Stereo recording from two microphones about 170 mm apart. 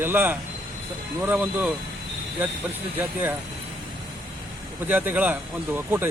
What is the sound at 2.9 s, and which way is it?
Speech, 10° right (ahead or behind).